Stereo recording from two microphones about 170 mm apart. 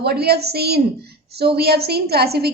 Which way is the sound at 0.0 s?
70° right (ahead or behind).